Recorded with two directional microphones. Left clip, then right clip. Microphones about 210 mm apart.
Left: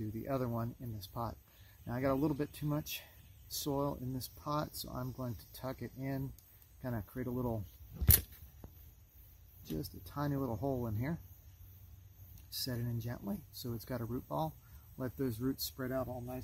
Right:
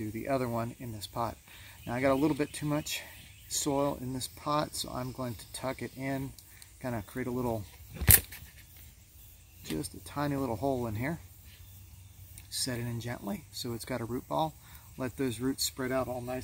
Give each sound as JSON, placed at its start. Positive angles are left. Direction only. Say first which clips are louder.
{"t": 0.2, "sound": "speech", "louder": "right 7 dB", "side_deg": 20}
{"t": 9.7, "sound": "speech", "louder": "right 6 dB", "side_deg": 0}
{"t": 10.0, "sound": "speech", "louder": "right 6 dB", "side_deg": 20}
{"t": 12.6, "sound": "speech", "louder": "right 6 dB", "side_deg": 20}